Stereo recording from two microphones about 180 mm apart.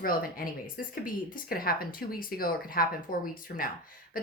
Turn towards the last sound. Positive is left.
turn(degrees=55)  # may be behind; listen again after turning